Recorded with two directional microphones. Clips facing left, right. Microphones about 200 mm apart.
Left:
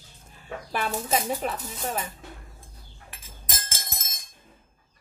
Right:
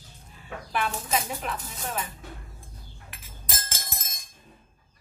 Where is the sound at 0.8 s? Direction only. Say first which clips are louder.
Left 2 dB; 40° left (ahead or behind).